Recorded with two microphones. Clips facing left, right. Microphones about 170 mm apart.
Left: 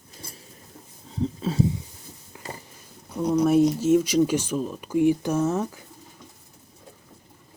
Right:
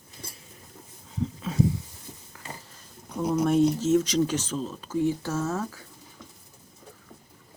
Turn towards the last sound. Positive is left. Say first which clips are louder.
# left 5 dB
turn(degrees=20)  # may be behind; listen again after turning